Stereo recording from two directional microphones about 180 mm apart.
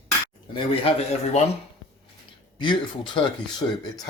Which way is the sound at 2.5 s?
25° left (ahead or behind).